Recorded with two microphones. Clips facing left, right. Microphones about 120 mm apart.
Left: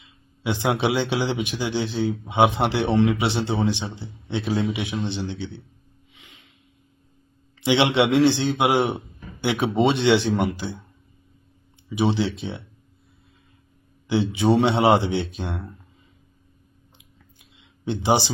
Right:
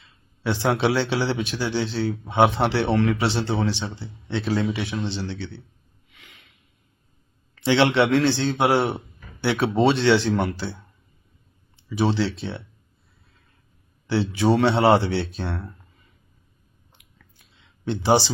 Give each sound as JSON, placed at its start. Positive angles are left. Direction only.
{"t": 0.4, "sound": "speech", "side_deg": 15}
{"t": 6.2, "sound": "a sound", "side_deg": -70}
{"t": 7.6, "sound": "speech", "side_deg": 15}
{"t": 11.9, "sound": "speech", "side_deg": 15}
{"t": 14.1, "sound": "speech", "side_deg": 15}
{"t": 17.8, "sound": "speech", "side_deg": 15}